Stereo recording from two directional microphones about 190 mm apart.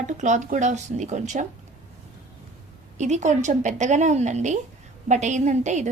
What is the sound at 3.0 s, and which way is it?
A woman's voice, 40° right (ahead or behind).